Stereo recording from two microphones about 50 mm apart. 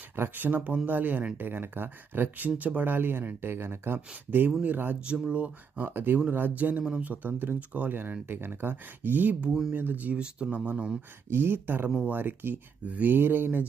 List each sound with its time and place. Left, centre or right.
0.2 s speech: right
2.6 s speech: right
3.4 s speech: right
3.9 s speech: right
5.3 s speech: right
5.8 s speech: right
7.3 s speech: right
7.7 s speech: right
9.4 s speech: centre
9.7 s speech: right
11.3 s speech: right
12.8 s speech: right